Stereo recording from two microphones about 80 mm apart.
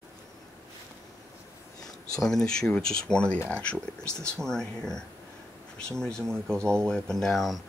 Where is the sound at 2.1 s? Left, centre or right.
Centre.